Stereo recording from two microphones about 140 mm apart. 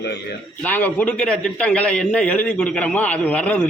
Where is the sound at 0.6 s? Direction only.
10° left (ahead or behind).